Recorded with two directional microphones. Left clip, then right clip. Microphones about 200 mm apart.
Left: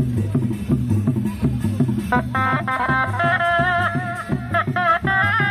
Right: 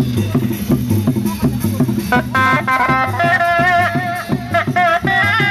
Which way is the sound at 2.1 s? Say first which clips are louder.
Right 6 dB; 35° right (ahead or behind).